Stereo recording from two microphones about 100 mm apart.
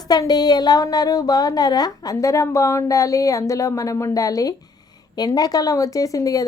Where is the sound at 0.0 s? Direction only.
40° left (ahead or behind).